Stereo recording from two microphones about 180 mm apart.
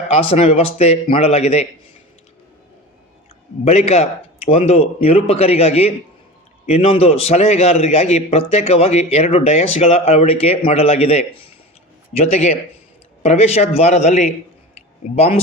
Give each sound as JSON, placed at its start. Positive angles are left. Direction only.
{"t": 0.1, "sound": "a man's voice", "side_deg": 35}
{"t": 3.6, "sound": "a man's voice", "side_deg": 35}